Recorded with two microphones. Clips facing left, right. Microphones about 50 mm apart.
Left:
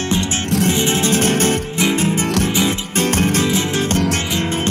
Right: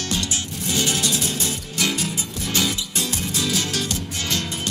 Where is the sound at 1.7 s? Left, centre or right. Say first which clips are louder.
Left 4 dB; left.